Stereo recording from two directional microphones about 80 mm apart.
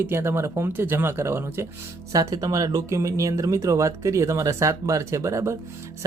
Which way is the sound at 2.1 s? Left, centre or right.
Right.